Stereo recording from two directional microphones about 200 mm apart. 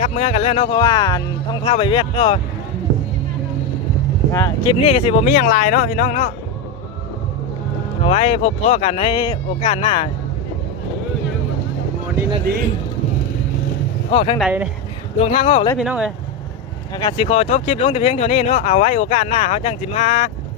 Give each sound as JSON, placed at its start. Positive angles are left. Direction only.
{"t": 0.0, "sound": "speech", "side_deg": 35}
{"t": 4.3, "sound": "speech", "side_deg": 15}
{"t": 4.8, "sound": "speech", "side_deg": 30}
{"t": 8.0, "sound": "speech", "side_deg": 30}
{"t": 12.5, "sound": "speech", "side_deg": -50}
{"t": 14.1, "sound": "speech", "side_deg": 25}
{"t": 14.3, "sound": "speech", "side_deg": -5}
{"t": 15.2, "sound": "speech", "side_deg": 30}
{"t": 15.8, "sound": "speech", "side_deg": -5}
{"t": 16.9, "sound": "speech", "side_deg": 20}